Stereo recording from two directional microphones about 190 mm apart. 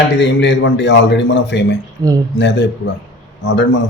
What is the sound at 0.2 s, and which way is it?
A man's voice, 70° left (ahead or behind).